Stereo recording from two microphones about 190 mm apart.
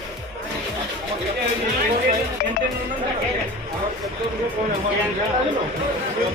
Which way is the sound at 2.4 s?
50° left (ahead or behind).